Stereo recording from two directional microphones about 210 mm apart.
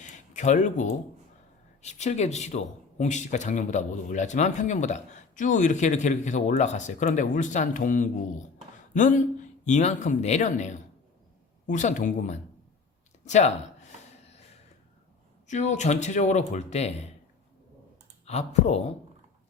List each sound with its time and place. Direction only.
0.0 s a sound: 35° left (ahead or behind)
1.8 s a man's voice: 35° left (ahead or behind)
15.4 s a man's voice: 35° left (ahead or behind)
18.3 s a man's voice: 30° left (ahead or behind)